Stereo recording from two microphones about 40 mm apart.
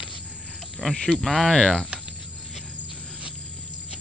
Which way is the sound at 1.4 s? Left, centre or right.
Centre.